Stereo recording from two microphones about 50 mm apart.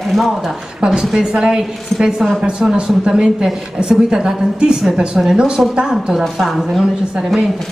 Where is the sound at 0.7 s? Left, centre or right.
Centre.